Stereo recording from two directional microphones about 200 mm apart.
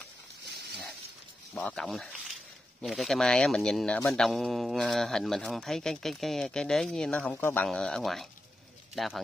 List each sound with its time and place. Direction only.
1.5 s a man's voice: 5° left (ahead or behind)